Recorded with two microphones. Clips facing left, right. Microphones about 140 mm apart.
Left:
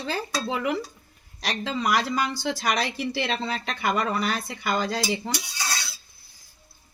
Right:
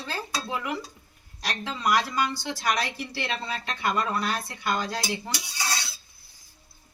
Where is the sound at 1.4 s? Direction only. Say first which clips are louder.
Left 5 dB; 90° left.